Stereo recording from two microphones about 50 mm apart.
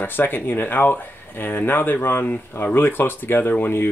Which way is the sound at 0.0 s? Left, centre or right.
Left.